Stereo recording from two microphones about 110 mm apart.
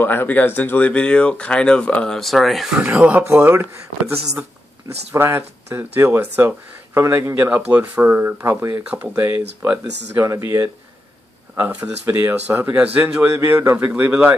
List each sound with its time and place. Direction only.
0.0 s speech: 20° left (ahead or behind); by 2.8 s centre (ahead or behind)
2.8 s speech: 15° right (ahead or behind); by 10.7 s 30° right (ahead or behind)
11.5 s speech: 15° right (ahead or behind)
13.2 s speech: 25° right (ahead or behind)